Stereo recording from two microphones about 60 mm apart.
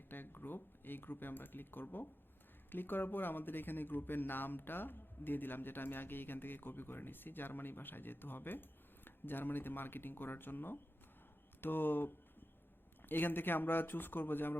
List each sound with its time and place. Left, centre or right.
0.1 s speech: left